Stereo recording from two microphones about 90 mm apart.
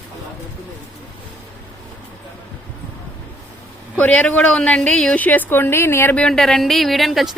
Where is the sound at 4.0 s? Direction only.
15° left (ahead or behind).